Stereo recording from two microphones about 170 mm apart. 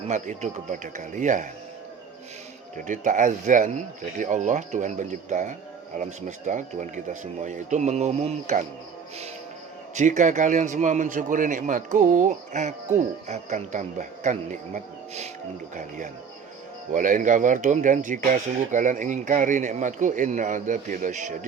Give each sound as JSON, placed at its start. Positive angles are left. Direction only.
{"t": 0.1, "sound": "speech", "side_deg": -45}
{"t": 2.7, "sound": "speech", "side_deg": -50}
{"t": 9.9, "sound": "speech", "side_deg": -45}
{"t": 16.9, "sound": "speech", "side_deg": -50}